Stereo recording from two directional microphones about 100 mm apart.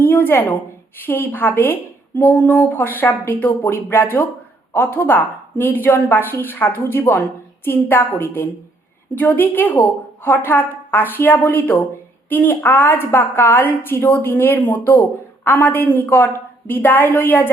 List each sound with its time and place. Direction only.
0.0 s a woman's voice: 20° left (ahead or behind)